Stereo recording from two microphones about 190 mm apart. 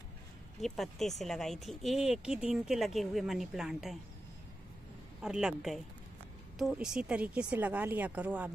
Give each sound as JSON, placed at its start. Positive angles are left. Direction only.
{"t": 0.6, "sound": "speech", "side_deg": 0}
{"t": 5.2, "sound": "speech", "side_deg": -5}